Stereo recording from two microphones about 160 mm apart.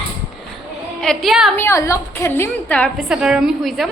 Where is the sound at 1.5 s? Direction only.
15° left (ahead or behind).